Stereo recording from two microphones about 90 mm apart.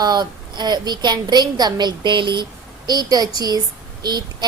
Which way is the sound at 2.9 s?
45° right (ahead or behind).